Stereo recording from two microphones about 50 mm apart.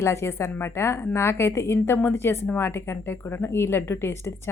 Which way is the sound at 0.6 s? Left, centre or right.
Left.